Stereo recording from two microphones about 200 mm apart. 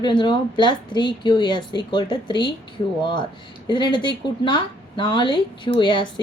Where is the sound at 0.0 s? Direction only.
25° left (ahead or behind).